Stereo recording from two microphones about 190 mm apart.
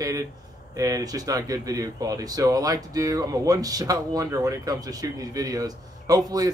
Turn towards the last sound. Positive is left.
turn(degrees=-20)  # may be behind; listen again after turning